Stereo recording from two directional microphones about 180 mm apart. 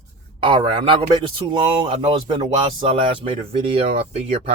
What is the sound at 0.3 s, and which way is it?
Speech, 30° right (ahead or behind).